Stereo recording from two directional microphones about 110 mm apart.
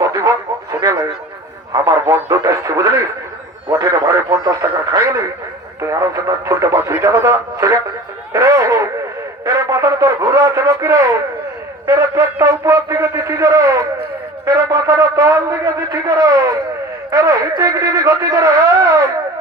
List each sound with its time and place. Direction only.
0.0 s radio: 30° right (ahead or behind)
1.8 s a man's voice: 25° right (ahead or behind)